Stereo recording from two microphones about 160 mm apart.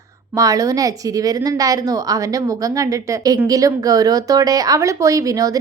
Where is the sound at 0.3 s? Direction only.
20° right (ahead or behind).